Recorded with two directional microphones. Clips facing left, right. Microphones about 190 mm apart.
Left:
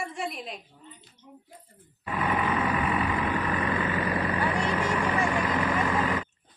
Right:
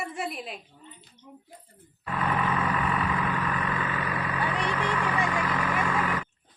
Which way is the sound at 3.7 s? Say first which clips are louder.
Left 3 dB; 30° left (ahead or behind).